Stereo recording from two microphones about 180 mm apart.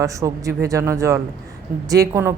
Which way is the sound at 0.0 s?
15° right (ahead or behind).